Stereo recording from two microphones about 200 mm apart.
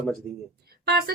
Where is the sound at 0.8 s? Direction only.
50° right (ahead or behind).